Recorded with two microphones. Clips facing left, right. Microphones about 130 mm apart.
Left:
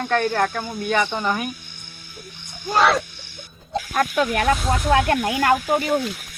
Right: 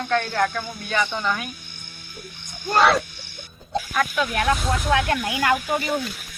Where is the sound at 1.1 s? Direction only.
15° left (ahead or behind).